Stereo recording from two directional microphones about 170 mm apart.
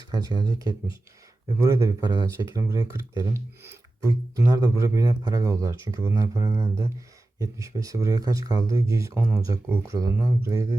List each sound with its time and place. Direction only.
0.0 s speech: 25° right (ahead or behind)